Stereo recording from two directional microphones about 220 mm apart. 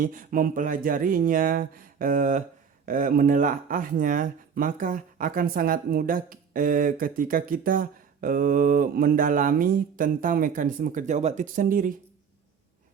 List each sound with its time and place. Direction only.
0.0 s speech: 40° right (ahead or behind)